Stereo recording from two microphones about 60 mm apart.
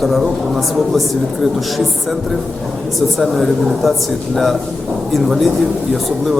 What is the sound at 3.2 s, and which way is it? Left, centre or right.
Speech, centre.